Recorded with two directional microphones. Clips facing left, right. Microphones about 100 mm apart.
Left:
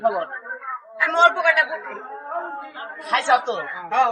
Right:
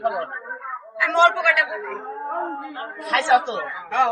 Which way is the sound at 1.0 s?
30° left (ahead or behind).